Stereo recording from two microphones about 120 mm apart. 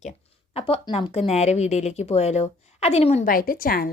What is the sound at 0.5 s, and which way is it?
A woman's voice, 55° left (ahead or behind).